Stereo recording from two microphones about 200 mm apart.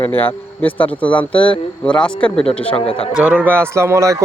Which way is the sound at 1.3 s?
25° left (ahead or behind).